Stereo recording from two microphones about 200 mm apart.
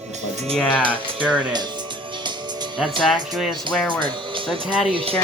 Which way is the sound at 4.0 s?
25° right (ahead or behind).